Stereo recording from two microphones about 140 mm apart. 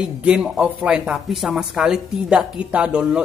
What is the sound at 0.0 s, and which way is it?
Speech, 5° right (ahead or behind).